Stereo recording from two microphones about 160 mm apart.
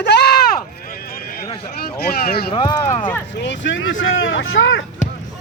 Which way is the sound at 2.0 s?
75° left (ahead or behind).